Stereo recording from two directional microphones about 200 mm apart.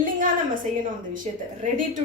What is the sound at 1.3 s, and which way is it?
Speech, 35° right (ahead or behind).